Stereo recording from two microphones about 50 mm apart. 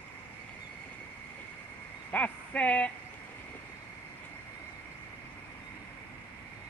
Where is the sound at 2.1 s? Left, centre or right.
Left.